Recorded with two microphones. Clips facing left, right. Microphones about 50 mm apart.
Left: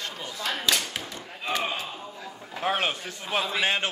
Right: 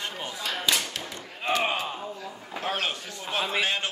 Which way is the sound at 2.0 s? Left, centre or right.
Centre.